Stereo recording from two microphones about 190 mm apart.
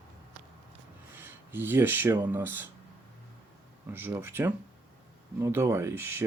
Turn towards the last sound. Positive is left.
turn(degrees=-15)  # may be behind; listen again after turning